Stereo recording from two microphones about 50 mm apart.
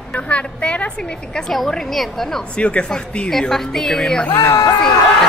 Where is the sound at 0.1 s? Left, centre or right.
Left.